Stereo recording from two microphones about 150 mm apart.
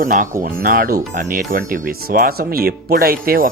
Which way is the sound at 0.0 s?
65° right (ahead or behind).